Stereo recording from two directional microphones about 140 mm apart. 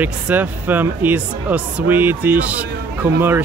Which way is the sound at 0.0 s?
10° right (ahead or behind).